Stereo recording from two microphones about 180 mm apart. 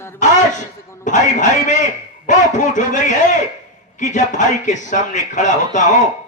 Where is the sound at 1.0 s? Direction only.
45° left (ahead or behind).